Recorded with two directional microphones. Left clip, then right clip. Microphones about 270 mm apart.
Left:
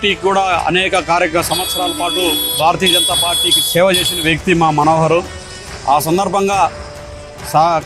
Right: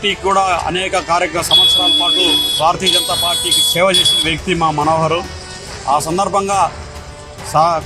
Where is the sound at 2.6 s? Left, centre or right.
Left.